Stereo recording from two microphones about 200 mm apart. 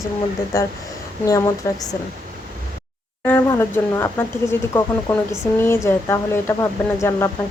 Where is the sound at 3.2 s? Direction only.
10° left (ahead or behind).